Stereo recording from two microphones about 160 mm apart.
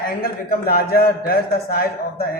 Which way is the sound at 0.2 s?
70° left (ahead or behind).